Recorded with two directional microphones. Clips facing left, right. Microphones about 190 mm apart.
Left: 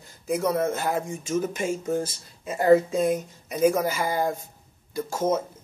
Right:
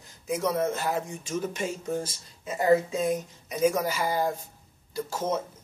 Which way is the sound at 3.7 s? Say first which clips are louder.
Left 3 dB; 50° left (ahead or behind).